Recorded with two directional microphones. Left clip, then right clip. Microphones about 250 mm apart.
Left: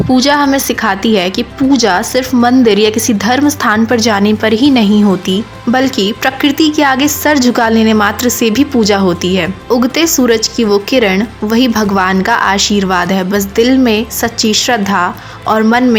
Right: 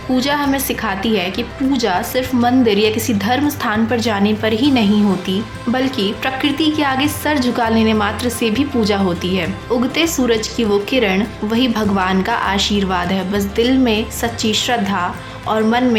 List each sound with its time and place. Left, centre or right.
0.1 s a woman's voice: left